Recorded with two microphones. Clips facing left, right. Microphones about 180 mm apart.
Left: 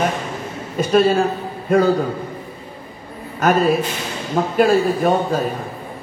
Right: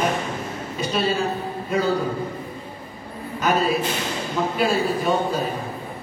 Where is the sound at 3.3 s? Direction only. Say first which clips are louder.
Left 5 dB; 50° left (ahead or behind).